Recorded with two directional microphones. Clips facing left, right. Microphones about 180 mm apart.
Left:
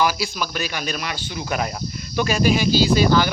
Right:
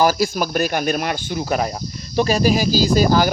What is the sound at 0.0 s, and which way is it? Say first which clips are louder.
Speech: right 5 dB; 45° right (ahead or behind).